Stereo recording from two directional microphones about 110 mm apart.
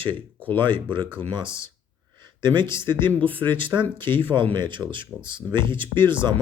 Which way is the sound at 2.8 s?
45° right (ahead or behind).